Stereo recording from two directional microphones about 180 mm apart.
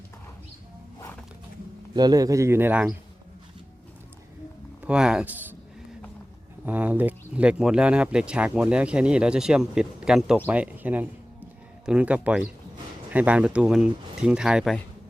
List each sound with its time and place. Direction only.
1.9 s speech: 20° right (ahead or behind)
4.8 s speech: 5° right (ahead or behind)
6.7 s speech: 10° right (ahead or behind)